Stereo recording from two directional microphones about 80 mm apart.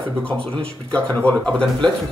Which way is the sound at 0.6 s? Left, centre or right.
Centre.